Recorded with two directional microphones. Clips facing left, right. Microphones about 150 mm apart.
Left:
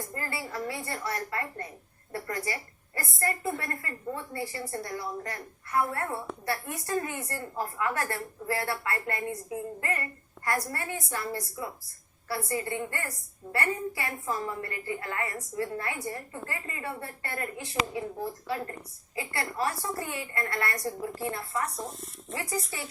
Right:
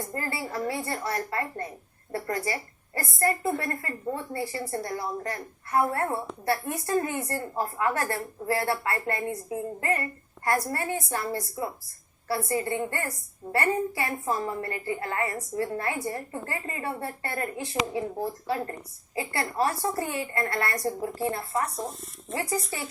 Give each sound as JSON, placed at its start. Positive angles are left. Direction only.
{"t": 0.1, "sound": "a woman's voice", "side_deg": -30}
{"t": 19.1, "sound": "a woman's voice", "side_deg": -30}